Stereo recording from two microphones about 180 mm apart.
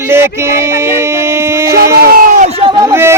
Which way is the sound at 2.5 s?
25° right (ahead or behind).